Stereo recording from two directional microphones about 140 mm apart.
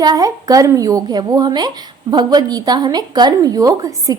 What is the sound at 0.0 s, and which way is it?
A woman's voice, 25° right (ahead or behind).